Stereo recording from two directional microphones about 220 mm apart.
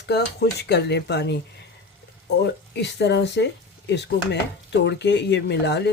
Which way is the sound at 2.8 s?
50° left (ahead or behind).